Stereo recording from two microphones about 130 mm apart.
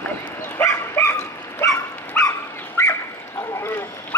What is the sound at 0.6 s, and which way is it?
Dog, 20° left (ahead or behind).